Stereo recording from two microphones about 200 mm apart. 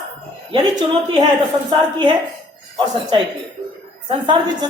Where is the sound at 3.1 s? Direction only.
25° right (ahead or behind).